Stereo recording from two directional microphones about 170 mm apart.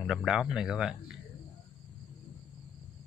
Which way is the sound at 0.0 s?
Centre (ahead or behind).